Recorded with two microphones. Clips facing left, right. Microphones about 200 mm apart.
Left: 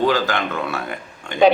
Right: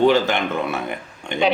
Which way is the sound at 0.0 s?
25° right (ahead or behind).